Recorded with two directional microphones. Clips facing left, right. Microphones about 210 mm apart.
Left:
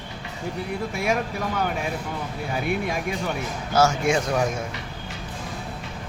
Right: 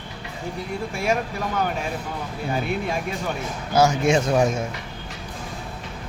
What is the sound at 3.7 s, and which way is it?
Speech, 15° right (ahead or behind).